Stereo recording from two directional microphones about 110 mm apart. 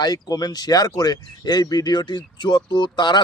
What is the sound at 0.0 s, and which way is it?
Speech, 35° left (ahead or behind).